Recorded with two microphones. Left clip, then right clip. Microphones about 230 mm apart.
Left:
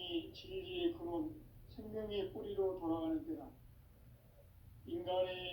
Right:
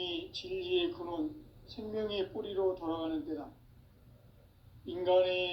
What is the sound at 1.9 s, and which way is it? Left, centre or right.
Speech, right.